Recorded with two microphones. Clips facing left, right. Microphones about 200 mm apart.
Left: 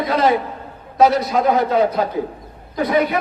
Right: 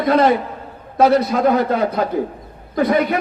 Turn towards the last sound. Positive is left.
turn(degrees=-55)  # may be behind; listen again after turning